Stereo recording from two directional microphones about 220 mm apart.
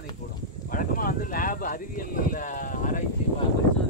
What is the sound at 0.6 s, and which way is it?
Speech, 40° left (ahead or behind).